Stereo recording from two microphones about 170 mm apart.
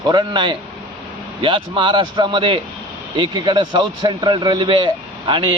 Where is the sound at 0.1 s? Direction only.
25° right (ahead or behind).